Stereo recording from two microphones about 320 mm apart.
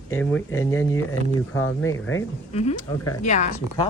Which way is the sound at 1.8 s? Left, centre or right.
Left.